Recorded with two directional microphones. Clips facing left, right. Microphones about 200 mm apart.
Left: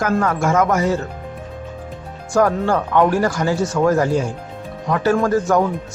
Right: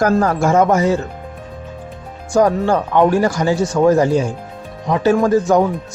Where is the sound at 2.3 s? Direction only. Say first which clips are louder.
Right 2 dB; 15° right (ahead or behind).